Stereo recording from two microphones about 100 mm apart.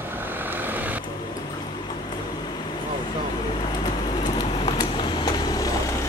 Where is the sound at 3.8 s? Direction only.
45° left (ahead or behind).